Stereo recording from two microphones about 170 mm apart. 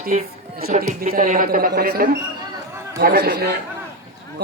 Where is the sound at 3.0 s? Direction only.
75° right (ahead or behind).